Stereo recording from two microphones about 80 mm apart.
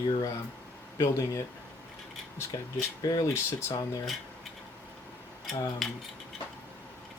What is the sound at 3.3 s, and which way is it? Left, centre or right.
Speech, left.